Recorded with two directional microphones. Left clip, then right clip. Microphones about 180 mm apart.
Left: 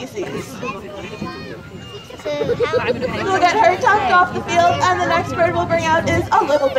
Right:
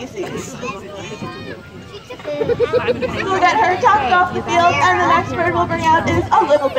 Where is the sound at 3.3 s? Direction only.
55° left (ahead or behind).